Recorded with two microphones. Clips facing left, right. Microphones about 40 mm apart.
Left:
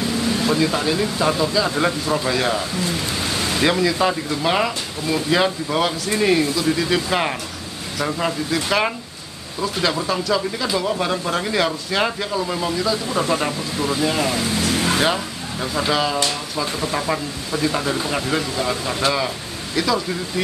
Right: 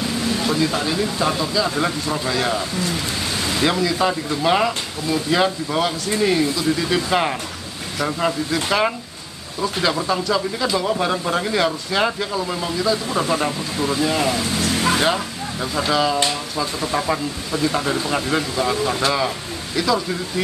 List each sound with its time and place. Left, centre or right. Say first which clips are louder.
0.2 s speech: left 1 dB; centre
14.8 s vehicle: right 2 dB; centre
15.6 s speech: right 1 dB; centre